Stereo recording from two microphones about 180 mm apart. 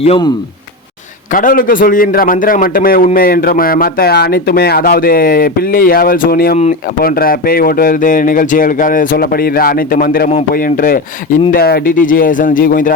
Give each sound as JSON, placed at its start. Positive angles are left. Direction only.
{"t": 0.0, "sound": "speech", "side_deg": 30}
{"t": 1.3, "sound": "a man's voice", "side_deg": 50}